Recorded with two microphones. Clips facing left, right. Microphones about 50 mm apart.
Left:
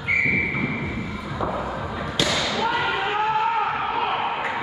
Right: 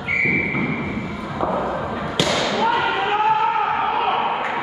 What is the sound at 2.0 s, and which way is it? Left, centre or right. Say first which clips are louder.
Basketball bounce: right 1 dB; centre.